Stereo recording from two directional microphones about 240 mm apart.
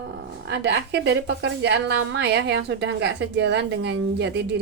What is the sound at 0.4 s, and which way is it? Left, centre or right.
Speech, right.